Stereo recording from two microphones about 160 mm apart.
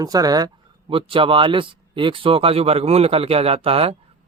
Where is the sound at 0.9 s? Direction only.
35° right (ahead or behind).